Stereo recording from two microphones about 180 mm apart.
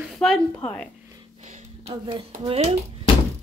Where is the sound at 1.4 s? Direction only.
40° right (ahead or behind).